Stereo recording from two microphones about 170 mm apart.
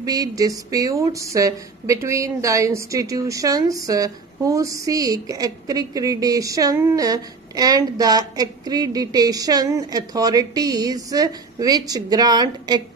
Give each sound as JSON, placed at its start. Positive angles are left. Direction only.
{"t": 0.0, "sound": "speech", "side_deg": -20}